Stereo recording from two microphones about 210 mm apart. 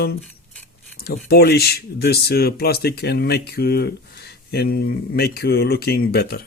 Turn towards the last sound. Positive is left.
turn(degrees=50)  # may be behind; listen again after turning